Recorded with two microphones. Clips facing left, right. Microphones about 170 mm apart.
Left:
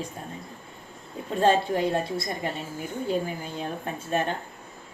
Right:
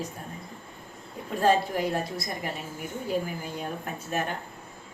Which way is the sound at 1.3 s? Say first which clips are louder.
Left 2 dB; 25° left (ahead or behind).